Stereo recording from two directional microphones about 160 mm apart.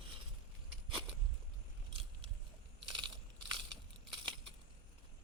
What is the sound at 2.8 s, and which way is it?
Mechanisms, 30° right (ahead or behind).